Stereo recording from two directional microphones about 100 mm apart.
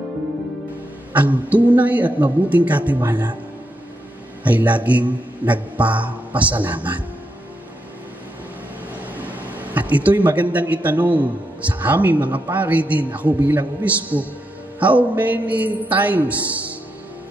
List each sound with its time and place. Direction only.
1.1 s a man's voice: 15° right (ahead or behind)
4.4 s a man's voice: 15° right (ahead or behind)
9.0 s a man's voice: 15° right (ahead or behind)